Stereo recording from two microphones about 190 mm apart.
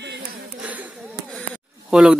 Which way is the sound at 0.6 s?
5° right (ahead or behind).